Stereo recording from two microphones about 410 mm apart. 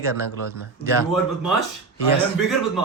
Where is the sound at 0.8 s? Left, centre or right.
Centre.